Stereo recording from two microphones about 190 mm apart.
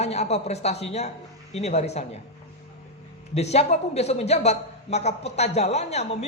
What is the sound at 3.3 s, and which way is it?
Speech, 35° left (ahead or behind).